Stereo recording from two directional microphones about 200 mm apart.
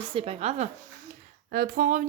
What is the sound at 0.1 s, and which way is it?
Speech, 30° right (ahead or behind).